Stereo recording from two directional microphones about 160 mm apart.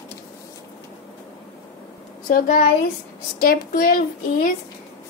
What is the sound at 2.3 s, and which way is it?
A woman's voice, 55° left (ahead or behind).